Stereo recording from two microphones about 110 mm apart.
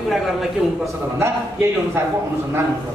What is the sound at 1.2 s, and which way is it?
Speech, 25° right (ahead or behind).